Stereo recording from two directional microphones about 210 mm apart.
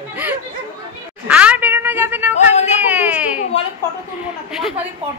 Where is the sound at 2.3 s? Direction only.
35° left (ahead or behind).